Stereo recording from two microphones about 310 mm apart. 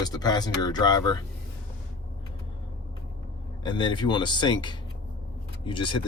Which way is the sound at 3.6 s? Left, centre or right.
Centre.